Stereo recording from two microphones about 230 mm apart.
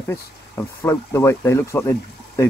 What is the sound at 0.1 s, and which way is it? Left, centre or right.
Speech, centre.